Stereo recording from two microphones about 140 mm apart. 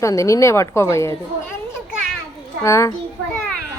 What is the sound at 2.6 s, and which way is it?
Speech, 20° left (ahead or behind).